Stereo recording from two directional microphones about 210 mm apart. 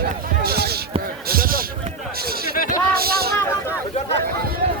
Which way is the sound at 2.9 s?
45° right (ahead or behind).